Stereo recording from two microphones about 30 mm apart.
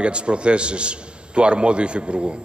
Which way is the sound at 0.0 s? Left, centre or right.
Right.